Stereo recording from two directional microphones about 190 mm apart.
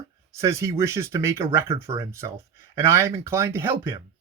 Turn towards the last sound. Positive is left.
turn(degrees=-10)  # may be behind; listen again after turning